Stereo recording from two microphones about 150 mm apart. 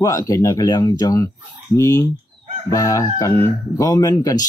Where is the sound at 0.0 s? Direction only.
25° left (ahead or behind).